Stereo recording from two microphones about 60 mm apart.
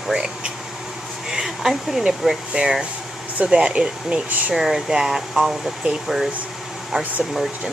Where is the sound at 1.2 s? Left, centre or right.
Centre.